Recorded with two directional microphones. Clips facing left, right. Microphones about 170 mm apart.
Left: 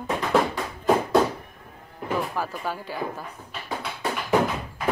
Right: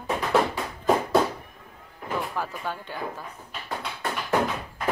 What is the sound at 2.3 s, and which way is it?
Speech, 5° left (ahead or behind).